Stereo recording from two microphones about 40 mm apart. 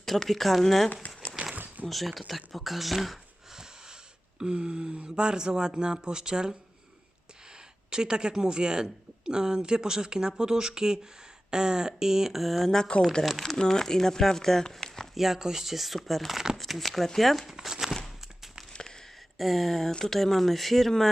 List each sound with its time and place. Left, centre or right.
0.0 s speech: centre
1.5 s a sound: right
1.9 s speech: centre
3.5 s wheeze: centre
4.4 s a woman's voice: right
7.9 s a woman's voice: centre
12.9 s speech: left
13.2 s speech: centre
15.1 s speech: centre
17.5 s speech: centre
18.7 s a sound: centre
19.4 s speech: centre